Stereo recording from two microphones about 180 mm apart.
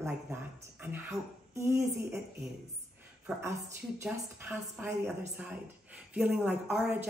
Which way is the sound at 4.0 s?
15° right (ahead or behind).